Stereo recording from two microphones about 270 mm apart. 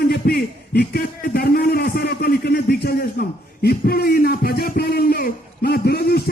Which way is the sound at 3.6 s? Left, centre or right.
Left.